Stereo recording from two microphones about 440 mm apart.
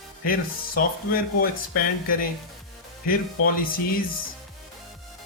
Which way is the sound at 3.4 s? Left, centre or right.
Left.